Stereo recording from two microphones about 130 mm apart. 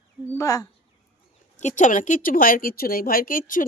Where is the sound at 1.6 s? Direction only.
65° left (ahead or behind).